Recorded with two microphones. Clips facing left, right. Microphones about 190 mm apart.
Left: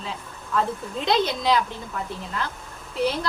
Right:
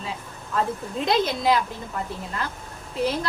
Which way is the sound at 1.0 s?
5° right (ahead or behind).